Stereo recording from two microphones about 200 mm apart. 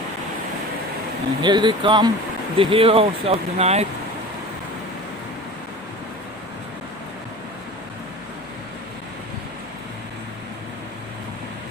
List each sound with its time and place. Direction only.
1.4 s speech: 20° right (ahead or behind)